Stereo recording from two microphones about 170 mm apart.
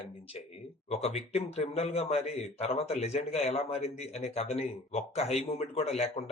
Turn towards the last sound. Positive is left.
turn(degrees=35)  # may be behind; listen again after turning